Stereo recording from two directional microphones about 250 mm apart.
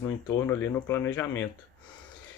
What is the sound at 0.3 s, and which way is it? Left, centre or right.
Speech, centre.